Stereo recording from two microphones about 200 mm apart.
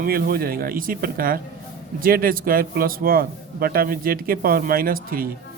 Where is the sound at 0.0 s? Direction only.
50° right (ahead or behind).